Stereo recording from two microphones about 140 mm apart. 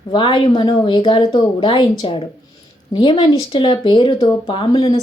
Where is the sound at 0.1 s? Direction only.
35° left (ahead or behind).